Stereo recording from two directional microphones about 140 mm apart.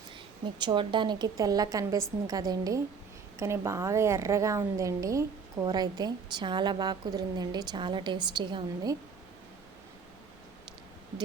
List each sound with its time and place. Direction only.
0.6 s speech: 35° right (ahead or behind)